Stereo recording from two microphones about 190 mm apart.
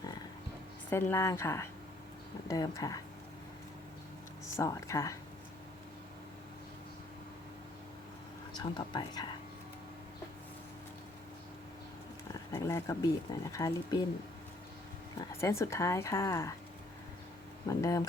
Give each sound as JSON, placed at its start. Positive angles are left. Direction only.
{"t": 0.9, "sound": "speech", "side_deg": 10}
{"t": 4.5, "sound": "speech", "side_deg": 15}
{"t": 8.5, "sound": "speech", "side_deg": 25}
{"t": 12.3, "sound": "speech", "side_deg": 15}
{"t": 15.2, "sound": "speech", "side_deg": 15}
{"t": 17.7, "sound": "speech", "side_deg": 15}